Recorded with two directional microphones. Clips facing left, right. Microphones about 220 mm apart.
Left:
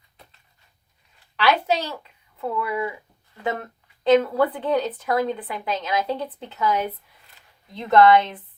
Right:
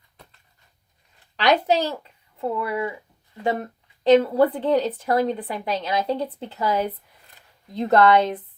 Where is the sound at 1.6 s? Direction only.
40° right (ahead or behind).